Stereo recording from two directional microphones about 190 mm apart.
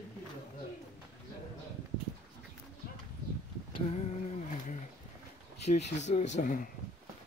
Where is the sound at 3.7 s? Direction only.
35° left (ahead or behind).